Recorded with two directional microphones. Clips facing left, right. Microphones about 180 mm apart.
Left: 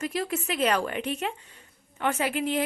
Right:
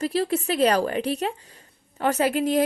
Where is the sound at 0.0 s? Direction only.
35° right (ahead or behind).